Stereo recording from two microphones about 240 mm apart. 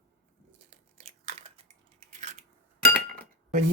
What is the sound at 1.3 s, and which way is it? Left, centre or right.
Typing, right.